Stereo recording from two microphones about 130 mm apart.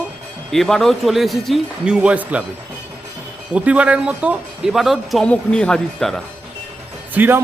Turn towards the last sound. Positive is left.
turn(degrees=-15)  # may be behind; listen again after turning